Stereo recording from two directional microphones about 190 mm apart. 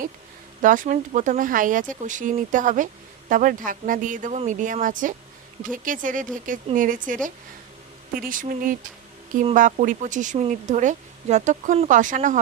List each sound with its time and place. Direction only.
0.6 s speech: 45° right (ahead or behind)